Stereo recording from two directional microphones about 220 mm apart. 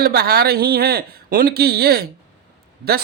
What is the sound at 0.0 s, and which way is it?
Speech, 45° right (ahead or behind).